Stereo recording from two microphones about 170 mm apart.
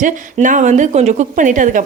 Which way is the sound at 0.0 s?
50° right (ahead or behind).